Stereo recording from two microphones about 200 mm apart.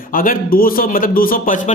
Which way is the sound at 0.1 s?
45° left (ahead or behind).